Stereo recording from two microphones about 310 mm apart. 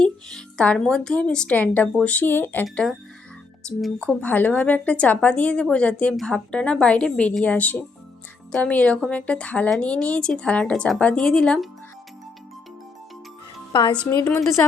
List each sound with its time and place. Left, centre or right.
0.0 s a woman's voice: centre
13.9 s a woman's voice: centre